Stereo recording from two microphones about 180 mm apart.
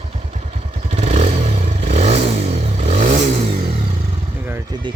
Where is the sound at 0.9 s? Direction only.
40° right (ahead or behind).